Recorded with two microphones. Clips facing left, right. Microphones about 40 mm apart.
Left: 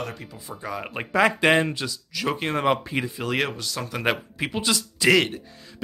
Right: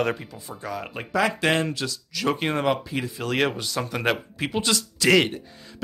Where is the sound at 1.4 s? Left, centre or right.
Centre.